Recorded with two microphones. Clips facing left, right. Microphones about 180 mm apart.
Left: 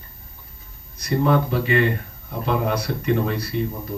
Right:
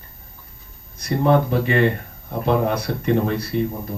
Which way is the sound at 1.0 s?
50° right (ahead or behind).